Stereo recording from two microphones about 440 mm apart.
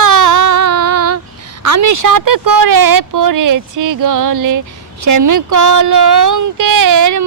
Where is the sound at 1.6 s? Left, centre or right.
Right.